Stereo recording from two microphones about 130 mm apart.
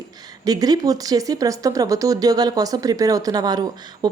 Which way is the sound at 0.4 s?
30° right (ahead or behind).